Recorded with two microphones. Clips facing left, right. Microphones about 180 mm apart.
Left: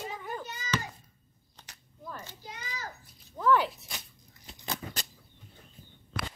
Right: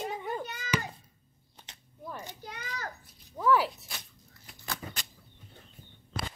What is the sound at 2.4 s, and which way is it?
Children playing, 60° right (ahead or behind).